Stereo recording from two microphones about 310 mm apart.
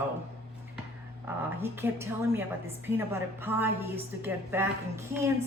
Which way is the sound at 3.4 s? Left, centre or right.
Centre.